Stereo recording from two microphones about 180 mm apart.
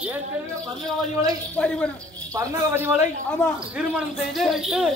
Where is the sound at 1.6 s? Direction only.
5° left (ahead or behind).